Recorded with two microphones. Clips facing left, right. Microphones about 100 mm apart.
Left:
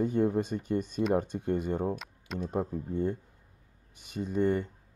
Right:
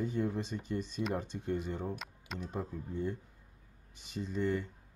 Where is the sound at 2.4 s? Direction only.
45° left (ahead or behind).